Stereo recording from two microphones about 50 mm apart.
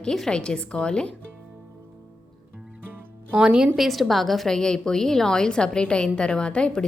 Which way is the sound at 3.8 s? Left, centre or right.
Centre.